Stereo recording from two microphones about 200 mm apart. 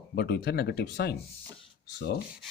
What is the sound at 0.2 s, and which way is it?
Speech, 55° left (ahead or behind).